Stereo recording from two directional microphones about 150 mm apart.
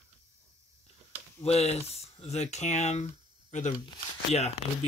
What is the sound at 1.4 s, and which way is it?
Speech, 45° left (ahead or behind).